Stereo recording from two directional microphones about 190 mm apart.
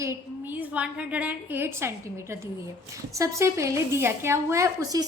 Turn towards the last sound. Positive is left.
turn(degrees=-20)  # may be behind; listen again after turning